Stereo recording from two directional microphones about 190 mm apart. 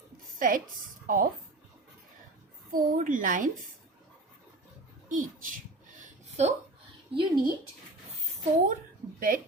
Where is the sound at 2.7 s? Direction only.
45° right (ahead or behind).